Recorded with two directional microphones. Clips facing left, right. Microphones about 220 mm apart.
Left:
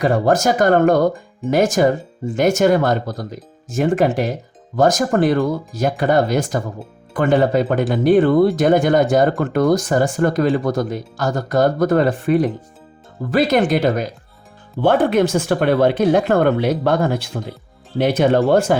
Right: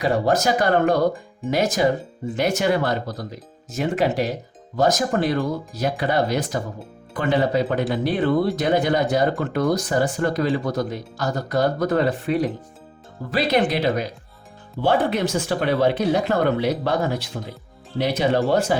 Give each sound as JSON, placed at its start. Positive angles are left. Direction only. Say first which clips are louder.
{"t": 0.0, "sound": "speech", "louder": "left 4 dB", "side_deg": 50}